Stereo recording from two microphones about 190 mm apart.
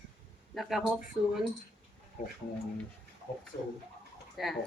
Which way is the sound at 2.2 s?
40° left (ahead or behind).